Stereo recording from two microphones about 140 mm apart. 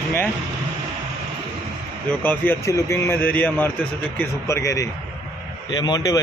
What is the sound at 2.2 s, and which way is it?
A man's voice, 15° left (ahead or behind).